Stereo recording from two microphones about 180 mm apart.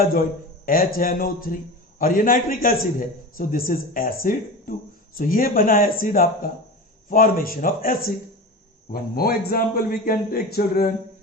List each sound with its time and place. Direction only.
0.6 s a man's voice: 55° left (ahead or behind)